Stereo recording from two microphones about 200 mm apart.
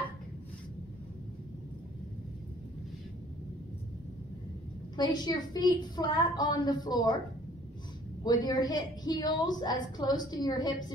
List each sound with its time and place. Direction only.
4.9 s a woman's voice: 20° left (ahead or behind)
8.2 s a woman's voice: 20° left (ahead or behind)